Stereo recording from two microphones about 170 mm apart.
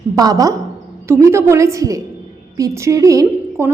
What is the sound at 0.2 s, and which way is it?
A woman's voice, 20° right (ahead or behind).